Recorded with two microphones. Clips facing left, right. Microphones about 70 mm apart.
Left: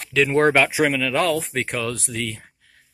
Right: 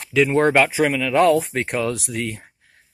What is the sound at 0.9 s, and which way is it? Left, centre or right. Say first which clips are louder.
Speech: right 5 dB; centre.